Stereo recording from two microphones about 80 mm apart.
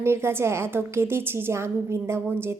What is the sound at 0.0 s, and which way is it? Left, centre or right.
A woman's voice, right.